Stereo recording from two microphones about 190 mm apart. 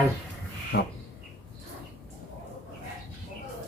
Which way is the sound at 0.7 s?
65° left (ahead or behind).